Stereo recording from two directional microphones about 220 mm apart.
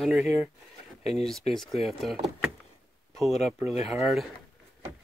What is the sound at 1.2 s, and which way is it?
Speech, centre (ahead or behind).